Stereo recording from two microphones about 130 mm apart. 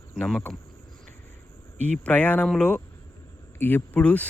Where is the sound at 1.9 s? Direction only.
10° left (ahead or behind).